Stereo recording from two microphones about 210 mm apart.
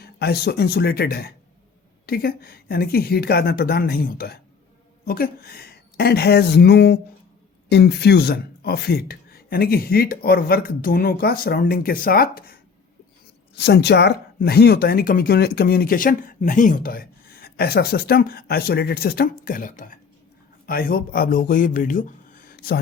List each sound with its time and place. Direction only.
0.0 s speech: 50° left (ahead or behind)
13.6 s speech: 50° left (ahead or behind)